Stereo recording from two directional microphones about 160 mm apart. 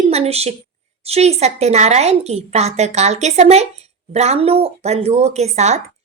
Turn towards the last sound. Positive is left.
turn(degrees=-45)  # may be behind; listen again after turning